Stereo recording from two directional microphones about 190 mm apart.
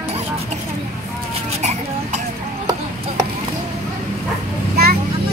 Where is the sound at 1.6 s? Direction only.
35° right (ahead or behind).